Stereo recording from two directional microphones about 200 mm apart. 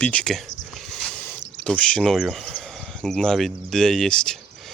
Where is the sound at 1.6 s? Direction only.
5° left (ahead or behind).